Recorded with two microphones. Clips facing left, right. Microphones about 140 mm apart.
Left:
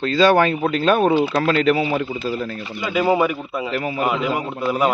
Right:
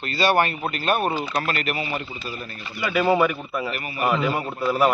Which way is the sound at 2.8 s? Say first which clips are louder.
Left 1 dB; 15° left (ahead or behind).